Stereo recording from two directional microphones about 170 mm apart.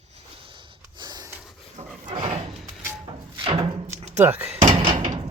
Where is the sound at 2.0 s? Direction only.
35° right (ahead or behind).